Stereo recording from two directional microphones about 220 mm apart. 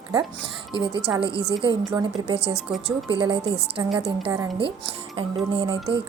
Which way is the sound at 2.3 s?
50° right (ahead or behind).